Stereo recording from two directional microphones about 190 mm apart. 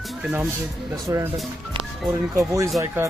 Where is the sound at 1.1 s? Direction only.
15° right (ahead or behind).